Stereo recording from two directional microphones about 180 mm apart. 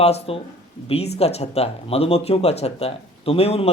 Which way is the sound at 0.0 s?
35° left (ahead or behind).